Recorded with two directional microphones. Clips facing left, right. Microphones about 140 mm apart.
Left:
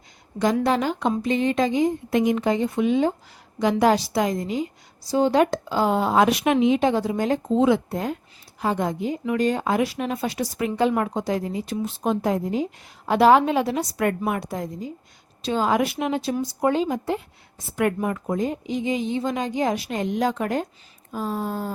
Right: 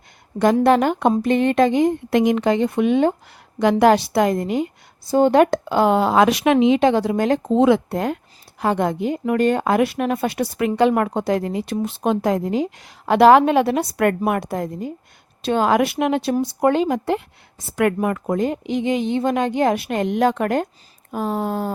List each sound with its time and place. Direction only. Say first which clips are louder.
0.6 s a woman's voice: right 6 dB; 60° right (ahead or behind)
17.7 s a woman's voice: right 4 dB; 80° right